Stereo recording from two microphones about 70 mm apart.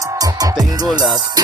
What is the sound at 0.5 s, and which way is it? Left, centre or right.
Music, right.